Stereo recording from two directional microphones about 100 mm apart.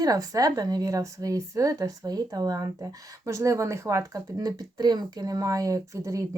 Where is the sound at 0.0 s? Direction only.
35° right (ahead or behind).